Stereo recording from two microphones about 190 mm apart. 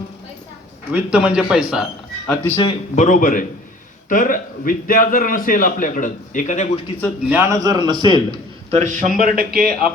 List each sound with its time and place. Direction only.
0.9 s a man's voice: 5° right (ahead or behind)
2.6 s a man's voice: 35° left (ahead or behind)
7.3 s a man's voice: 15° right (ahead or behind)
8.8 s a man's voice: 40° right (ahead or behind)